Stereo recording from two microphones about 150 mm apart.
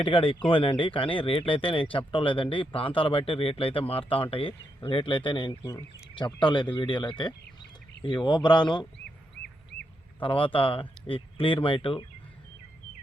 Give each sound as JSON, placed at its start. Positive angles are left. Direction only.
{"t": 0.0, "sound": "speech", "side_deg": 35}
{"t": 10.2, "sound": "speech", "side_deg": 35}